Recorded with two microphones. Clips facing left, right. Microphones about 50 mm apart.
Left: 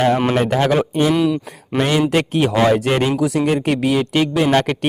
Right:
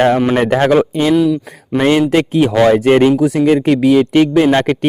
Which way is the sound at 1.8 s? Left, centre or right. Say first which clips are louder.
Right 5 dB; right.